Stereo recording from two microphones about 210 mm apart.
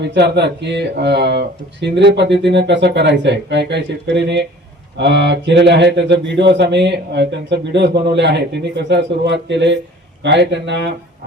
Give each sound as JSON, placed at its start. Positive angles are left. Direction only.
{"t": 0.0, "sound": "speech", "side_deg": -55}